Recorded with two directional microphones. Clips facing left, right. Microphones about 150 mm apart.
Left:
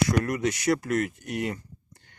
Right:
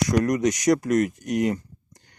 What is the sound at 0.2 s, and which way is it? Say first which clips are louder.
Speech: right 5 dB; 35° right (ahead or behind).